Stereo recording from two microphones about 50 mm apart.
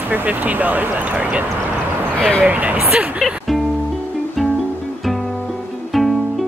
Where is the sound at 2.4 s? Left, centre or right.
Right.